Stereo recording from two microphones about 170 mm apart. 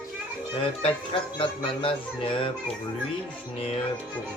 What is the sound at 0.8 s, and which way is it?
Speech, 30° left (ahead or behind).